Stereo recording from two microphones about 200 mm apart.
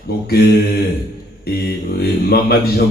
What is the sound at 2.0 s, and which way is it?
Speech, 50° left (ahead or behind).